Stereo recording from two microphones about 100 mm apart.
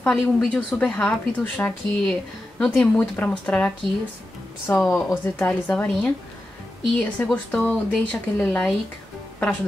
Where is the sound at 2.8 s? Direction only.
15° left (ahead or behind).